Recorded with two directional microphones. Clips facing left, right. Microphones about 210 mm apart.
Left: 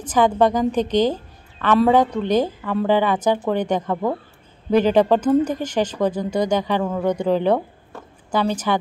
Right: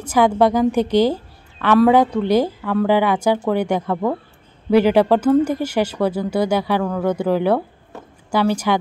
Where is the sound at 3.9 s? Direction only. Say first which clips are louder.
Right 2 dB; 5° left (ahead or behind).